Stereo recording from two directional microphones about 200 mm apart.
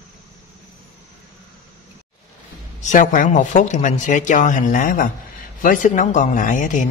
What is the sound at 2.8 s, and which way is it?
Speech, 40° left (ahead or behind).